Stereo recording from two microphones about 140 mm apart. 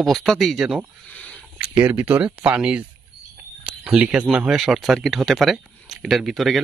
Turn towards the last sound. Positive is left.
turn(degrees=0)  # may be behind; listen again after turning